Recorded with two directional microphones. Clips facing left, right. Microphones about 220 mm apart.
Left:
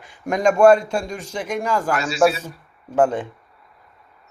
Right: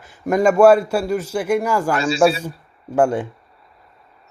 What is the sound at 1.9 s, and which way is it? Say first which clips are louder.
Speech: right 4 dB; 30° right (ahead or behind).